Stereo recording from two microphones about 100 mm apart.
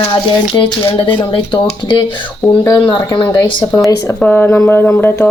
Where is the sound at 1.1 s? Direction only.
55° left (ahead or behind).